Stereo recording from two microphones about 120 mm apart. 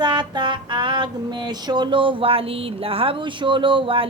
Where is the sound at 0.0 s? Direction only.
40° right (ahead or behind).